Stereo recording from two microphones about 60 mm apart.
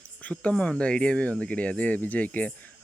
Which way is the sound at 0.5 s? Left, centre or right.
Centre.